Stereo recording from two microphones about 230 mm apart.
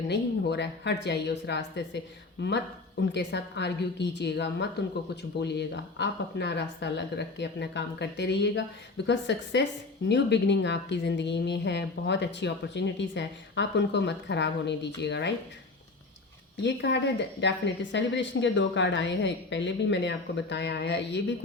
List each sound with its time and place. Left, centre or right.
0.1 s a woman's voice: left
16.6 s a woman's voice: left